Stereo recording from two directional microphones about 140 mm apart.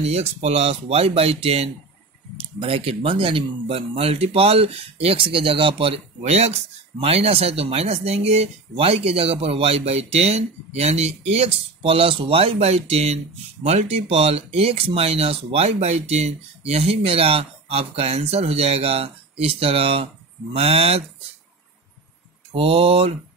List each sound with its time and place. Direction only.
0.0 s speech: 50° right (ahead or behind)
22.5 s speech: 40° right (ahead or behind)